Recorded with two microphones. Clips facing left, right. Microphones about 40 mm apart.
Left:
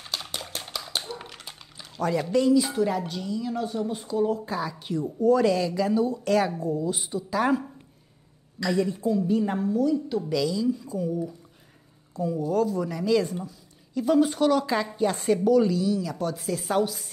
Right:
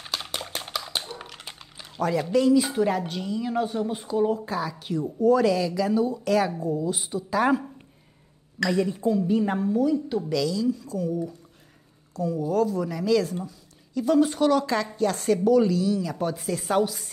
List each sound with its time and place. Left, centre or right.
0.2 s a sound: centre
2.0 s speech: centre
2.5 s a woman's voice: right; by 10.2 s centre
10.3 s speech: centre
15.0 s speech: centre